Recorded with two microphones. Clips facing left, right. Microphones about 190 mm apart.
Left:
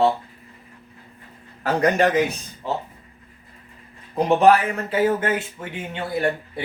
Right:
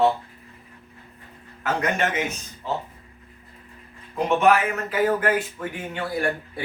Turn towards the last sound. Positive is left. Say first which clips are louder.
# left 2 dB
turn(degrees=25)  # may be behind; listen again after turning